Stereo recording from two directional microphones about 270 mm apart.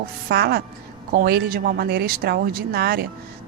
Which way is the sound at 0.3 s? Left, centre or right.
Right.